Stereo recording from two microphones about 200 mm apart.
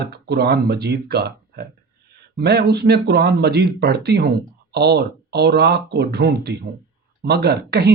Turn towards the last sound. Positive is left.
turn(degrees=-55)  # may be behind; listen again after turning